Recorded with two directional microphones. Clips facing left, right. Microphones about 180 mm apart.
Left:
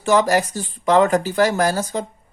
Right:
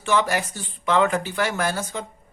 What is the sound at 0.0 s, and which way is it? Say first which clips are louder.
Speech: left 6 dB; 40° left (ahead or behind).